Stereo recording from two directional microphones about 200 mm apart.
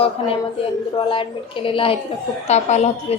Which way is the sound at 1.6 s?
25° left (ahead or behind).